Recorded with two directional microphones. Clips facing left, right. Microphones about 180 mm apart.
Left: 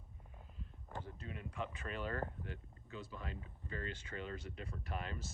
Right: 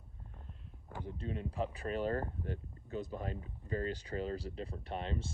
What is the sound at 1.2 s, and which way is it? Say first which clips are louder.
Speech: right 9 dB; 30° right (ahead or behind).